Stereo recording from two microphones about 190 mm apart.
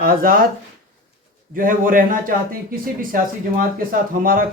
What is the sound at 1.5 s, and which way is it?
Speech, 45° right (ahead or behind).